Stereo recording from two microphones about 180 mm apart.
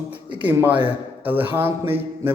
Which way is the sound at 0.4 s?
10° right (ahead or behind).